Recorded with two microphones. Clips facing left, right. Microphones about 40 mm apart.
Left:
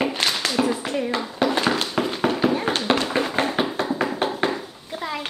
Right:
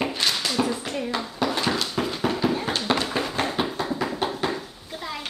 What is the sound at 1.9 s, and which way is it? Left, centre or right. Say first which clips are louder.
Tap: left 3 dB; centre.